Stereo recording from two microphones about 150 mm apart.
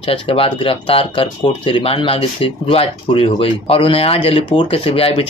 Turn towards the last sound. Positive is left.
turn(degrees=35)  # may be behind; listen again after turning